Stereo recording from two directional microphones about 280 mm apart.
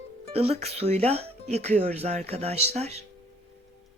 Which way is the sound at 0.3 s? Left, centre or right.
Right.